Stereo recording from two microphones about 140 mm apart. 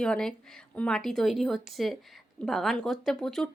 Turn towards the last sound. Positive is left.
turn(degrees=5)  # may be behind; listen again after turning